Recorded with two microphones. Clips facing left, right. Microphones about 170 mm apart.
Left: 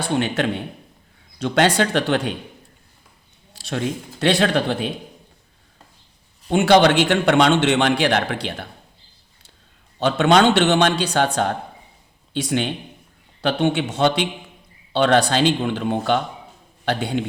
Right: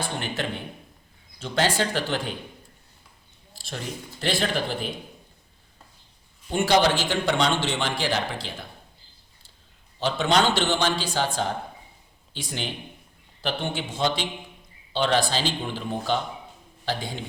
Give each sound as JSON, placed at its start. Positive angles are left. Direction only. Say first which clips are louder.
{"t": 0.0, "sound": "a man's voice", "louder": "left 9 dB", "side_deg": 75}
{"t": 3.5, "sound": "speech", "louder": "left 10 dB", "side_deg": 70}
{"t": 6.5, "sound": "a man's voice", "louder": "left 7 dB", "side_deg": 70}
{"t": 10.0, "sound": "a man's voice", "louder": "left 7 dB", "side_deg": 65}